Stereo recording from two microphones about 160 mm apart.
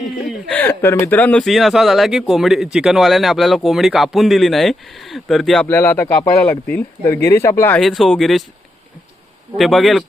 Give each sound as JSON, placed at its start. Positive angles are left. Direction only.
{"t": 0.0, "sound": "speech", "side_deg": 0}
{"t": 5.6, "sound": "speech", "side_deg": 15}
{"t": 7.0, "sound": "speech", "side_deg": 20}
{"t": 7.8, "sound": "speech", "side_deg": 0}
{"t": 9.6, "sound": "speech", "side_deg": 0}